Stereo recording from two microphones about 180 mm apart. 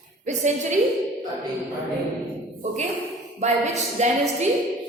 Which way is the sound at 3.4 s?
40° right (ahead or behind).